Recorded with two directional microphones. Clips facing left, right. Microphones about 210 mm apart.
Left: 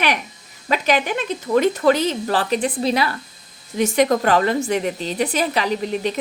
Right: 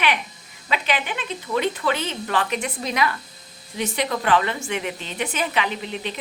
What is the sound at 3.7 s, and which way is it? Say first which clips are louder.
A woman's voice: left 8 dB; 45° left (ahead or behind).